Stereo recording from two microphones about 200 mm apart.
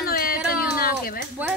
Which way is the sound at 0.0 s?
50° left (ahead or behind).